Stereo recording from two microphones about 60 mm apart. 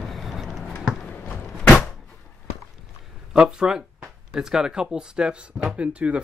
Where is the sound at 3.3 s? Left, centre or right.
Centre.